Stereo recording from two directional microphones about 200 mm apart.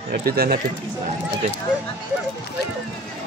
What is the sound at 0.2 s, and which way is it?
Speech, 50° right (ahead or behind).